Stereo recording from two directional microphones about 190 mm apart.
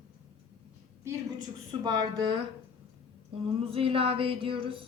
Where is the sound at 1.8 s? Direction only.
20° right (ahead or behind).